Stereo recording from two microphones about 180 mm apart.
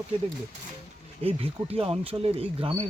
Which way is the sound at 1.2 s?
30° right (ahead or behind).